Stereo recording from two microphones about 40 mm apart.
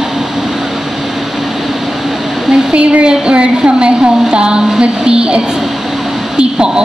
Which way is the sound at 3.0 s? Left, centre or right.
Right.